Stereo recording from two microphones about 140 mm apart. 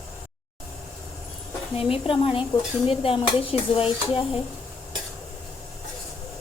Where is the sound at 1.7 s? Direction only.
40° left (ahead or behind).